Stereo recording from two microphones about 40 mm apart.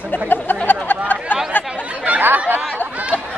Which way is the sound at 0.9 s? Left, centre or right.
Left.